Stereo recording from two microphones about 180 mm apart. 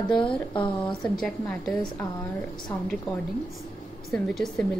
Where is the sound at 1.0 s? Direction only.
Centre (ahead or behind).